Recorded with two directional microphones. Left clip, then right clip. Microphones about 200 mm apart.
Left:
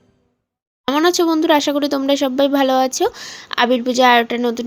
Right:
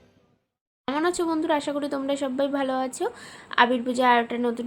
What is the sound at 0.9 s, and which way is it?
Speech, 35° left (ahead or behind).